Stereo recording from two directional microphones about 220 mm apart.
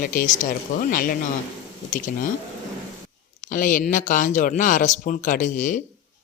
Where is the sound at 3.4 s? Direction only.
35° left (ahead or behind).